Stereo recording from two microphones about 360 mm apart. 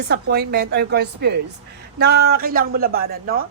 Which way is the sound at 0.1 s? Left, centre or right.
Right.